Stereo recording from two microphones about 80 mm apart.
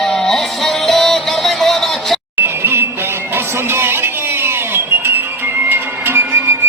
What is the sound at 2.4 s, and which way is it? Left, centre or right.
Music, right.